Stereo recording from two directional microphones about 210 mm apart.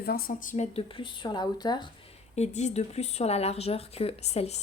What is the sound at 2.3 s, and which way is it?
Speech, 30° left (ahead or behind).